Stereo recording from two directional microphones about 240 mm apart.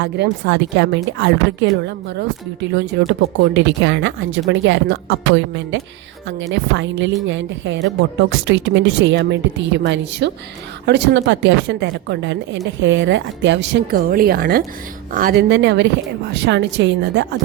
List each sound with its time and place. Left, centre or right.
0.0 s speech: right